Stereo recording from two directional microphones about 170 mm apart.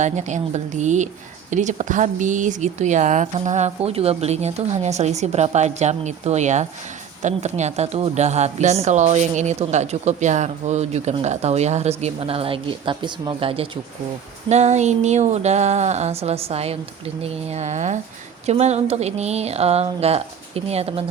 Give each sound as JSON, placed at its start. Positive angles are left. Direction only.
{"t": 0.0, "sound": "a woman's voice", "side_deg": -45}